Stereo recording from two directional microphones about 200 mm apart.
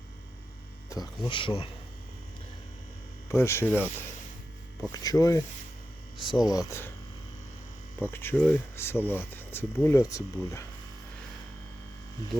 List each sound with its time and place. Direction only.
0.9 s speech: 20° left (ahead or behind)
3.2 s speech: 15° left (ahead or behind)
4.9 s speech: 20° left (ahead or behind)
8.0 s speech: 10° left (ahead or behind)